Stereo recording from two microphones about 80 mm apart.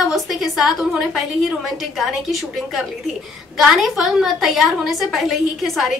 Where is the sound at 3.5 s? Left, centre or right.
Centre.